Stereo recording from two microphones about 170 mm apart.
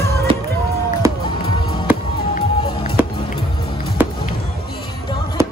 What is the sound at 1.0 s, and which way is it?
Music, 15° right (ahead or behind).